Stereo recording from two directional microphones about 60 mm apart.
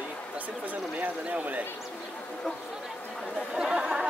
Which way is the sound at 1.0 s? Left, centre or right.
Right.